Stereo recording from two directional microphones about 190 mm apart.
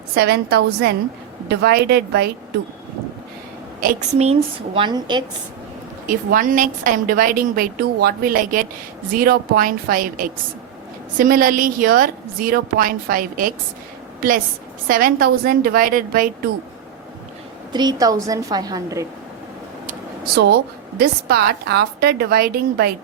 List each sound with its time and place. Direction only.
0.1 s a woman's voice: 55° right (ahead or behind)
4.2 s a woman's voice: 30° right (ahead or behind)
6.1 s a woman's voice: 45° right (ahead or behind)
17.7 s a woman's voice: 20° right (ahead or behind)
19.9 s a sound: 55° right (ahead or behind)
21.0 s a woman's voice: 55° right (ahead or behind)